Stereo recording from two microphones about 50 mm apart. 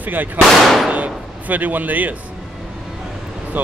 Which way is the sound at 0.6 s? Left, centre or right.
Centre.